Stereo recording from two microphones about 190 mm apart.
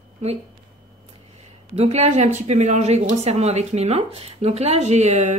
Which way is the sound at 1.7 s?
35° right (ahead or behind).